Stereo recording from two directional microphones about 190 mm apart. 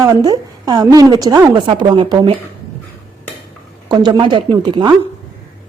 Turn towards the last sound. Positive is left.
turn(degrees=-25)  # may be behind; listen again after turning